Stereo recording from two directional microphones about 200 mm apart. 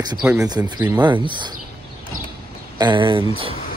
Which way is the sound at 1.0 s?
25° right (ahead or behind).